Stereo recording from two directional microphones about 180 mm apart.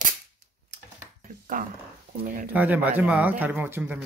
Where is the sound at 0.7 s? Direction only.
70° right (ahead or behind).